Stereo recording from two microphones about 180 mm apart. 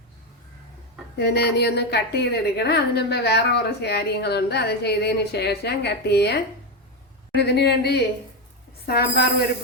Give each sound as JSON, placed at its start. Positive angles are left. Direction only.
{"t": 1.2, "sound": "a woman's voice", "side_deg": 65}